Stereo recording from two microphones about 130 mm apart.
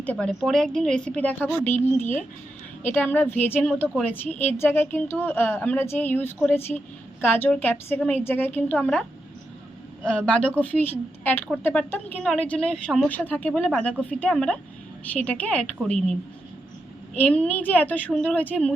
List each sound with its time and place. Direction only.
0.0 s speech: 10° left (ahead or behind)
10.0 s speech: 5° left (ahead or behind)
17.2 s speech: 10° left (ahead or behind)